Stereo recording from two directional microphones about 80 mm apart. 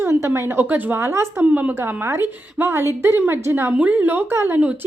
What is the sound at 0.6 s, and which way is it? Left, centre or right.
A woman's voice, right.